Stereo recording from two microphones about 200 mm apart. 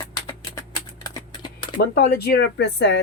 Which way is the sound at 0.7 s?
15° left (ahead or behind).